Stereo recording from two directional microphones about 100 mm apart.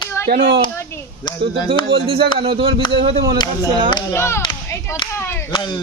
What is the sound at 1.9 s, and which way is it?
Speech, 70° right (ahead or behind).